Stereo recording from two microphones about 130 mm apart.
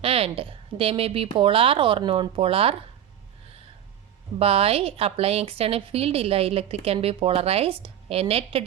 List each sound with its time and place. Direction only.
0.0 s speech: 45° right (ahead or behind)
4.4 s speech: 50° right (ahead or behind)